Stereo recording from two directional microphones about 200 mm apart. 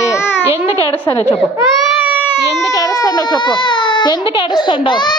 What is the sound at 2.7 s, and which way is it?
A child's voice, 20° left (ahead or behind).